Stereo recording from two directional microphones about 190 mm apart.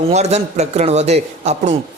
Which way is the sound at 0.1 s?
35° right (ahead or behind).